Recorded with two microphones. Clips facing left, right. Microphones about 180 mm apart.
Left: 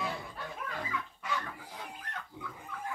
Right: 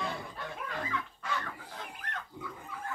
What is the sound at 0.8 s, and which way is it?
Fowl, 5° left (ahead or behind).